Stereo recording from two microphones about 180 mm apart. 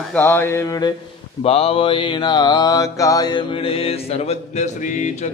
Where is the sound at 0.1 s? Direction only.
10° left (ahead or behind).